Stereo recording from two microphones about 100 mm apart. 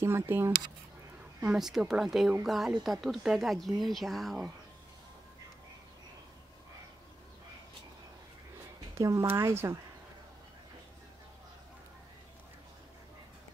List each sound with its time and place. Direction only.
0.0 s speech: 25° right (ahead or behind)
1.4 s speech: 5° right (ahead or behind)
8.9 s speech: 30° right (ahead or behind)